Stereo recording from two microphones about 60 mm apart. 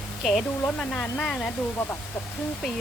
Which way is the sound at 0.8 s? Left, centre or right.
Centre.